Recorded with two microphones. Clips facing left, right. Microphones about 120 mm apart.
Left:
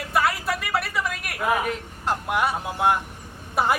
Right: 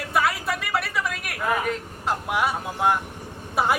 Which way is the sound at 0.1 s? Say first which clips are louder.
Left 1 dB; centre (ahead or behind).